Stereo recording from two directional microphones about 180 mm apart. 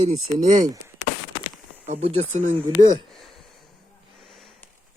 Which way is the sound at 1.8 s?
40° right (ahead or behind).